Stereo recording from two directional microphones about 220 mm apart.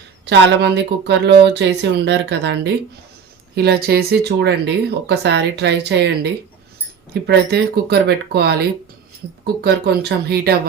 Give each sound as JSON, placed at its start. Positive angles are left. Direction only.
{"t": 0.3, "sound": "speech", "side_deg": -50}